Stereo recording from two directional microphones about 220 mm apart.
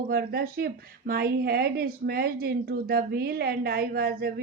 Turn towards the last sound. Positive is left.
turn(degrees=-45)  # may be behind; listen again after turning